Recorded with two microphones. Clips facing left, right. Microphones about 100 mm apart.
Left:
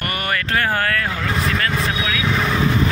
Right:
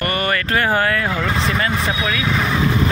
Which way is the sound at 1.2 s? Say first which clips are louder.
Right 2 dB; 20° right (ahead or behind).